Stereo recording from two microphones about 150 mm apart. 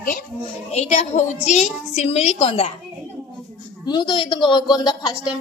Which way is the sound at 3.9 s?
30° left (ahead or behind).